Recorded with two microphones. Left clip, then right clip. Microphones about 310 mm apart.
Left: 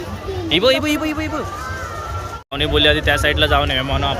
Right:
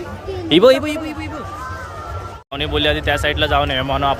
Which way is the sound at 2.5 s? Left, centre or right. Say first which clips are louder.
Left 3 dB; centre.